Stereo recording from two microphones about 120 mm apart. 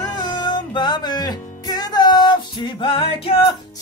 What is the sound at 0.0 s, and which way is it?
Music, 35° left (ahead or behind).